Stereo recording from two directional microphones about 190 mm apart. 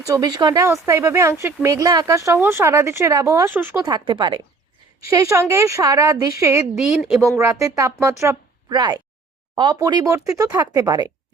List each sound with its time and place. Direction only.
0.1 s speech: 20° right (ahead or behind)
3.8 s speech: 25° right (ahead or behind)
6.7 s a woman's voice: centre (ahead or behind)
7.6 s speech: 15° right (ahead or behind)